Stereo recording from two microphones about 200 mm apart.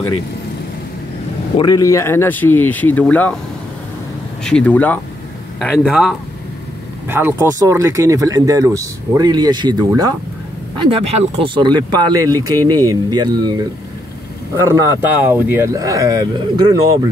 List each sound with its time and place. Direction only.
1.6 s speech: 15° left (ahead or behind)
4.5 s speech: 5° left (ahead or behind)
7.1 s speech: 10° right (ahead or behind)